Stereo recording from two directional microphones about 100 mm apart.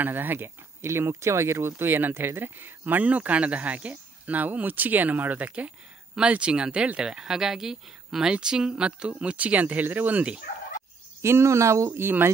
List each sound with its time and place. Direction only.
0.0 s speech: 20° right (ahead or behind)
11.1 s speech: 25° right (ahead or behind)